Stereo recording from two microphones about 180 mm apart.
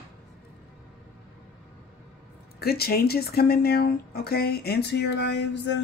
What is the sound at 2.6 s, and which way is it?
Speech, 60° left (ahead or behind).